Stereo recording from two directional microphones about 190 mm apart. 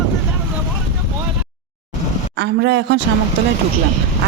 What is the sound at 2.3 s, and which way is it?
Speech, 65° right (ahead or behind).